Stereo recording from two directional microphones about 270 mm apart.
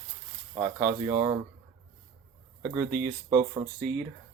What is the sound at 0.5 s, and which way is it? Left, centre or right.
Speech, centre.